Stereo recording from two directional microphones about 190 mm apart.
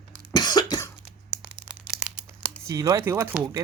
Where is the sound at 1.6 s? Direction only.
5° right (ahead or behind).